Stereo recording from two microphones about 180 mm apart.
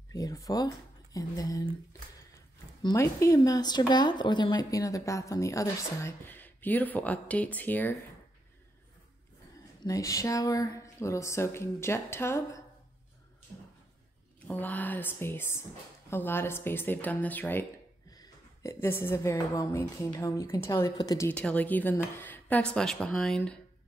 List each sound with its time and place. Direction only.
0.1 s speech: 20° left (ahead or behind)
2.8 s speech: 20° left (ahead or behind)
9.8 s speech: 20° left (ahead or behind)
14.5 s speech: 10° left (ahead or behind)
21.3 s speech: 10° left (ahead or behind)